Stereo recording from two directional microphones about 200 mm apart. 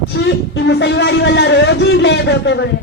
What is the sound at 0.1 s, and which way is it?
Speech, 60° left (ahead or behind).